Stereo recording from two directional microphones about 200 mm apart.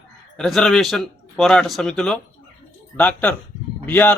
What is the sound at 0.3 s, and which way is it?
A man's voice, centre (ahead or behind).